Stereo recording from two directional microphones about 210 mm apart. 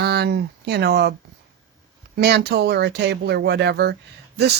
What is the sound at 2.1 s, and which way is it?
Speech, 50° right (ahead or behind).